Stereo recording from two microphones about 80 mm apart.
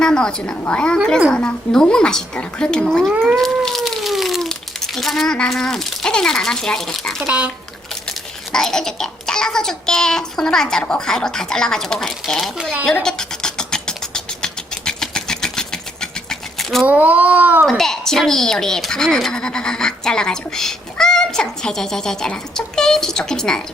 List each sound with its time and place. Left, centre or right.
0.0 s speech: centre
3.3 s a sound: centre
7.3 s speech: centre
8.5 s speech: centre
12.8 s a sound: centre
16.8 s a child's voice: centre
17.7 s speech: centre